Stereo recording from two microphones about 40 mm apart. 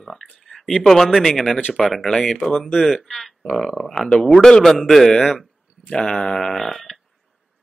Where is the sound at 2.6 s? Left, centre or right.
Centre.